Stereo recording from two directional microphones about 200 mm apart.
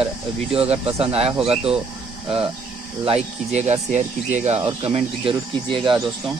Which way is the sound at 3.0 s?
30° right (ahead or behind).